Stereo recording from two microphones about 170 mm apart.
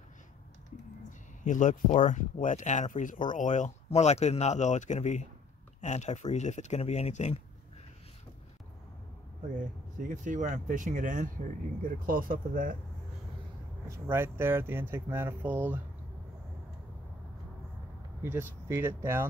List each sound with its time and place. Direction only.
1.4 s speech: 45° left (ahead or behind)
9.6 s speech: 50° right (ahead or behind)
13.8 s speech: 15° right (ahead or behind)
18.2 s speech: 15° right (ahead or behind)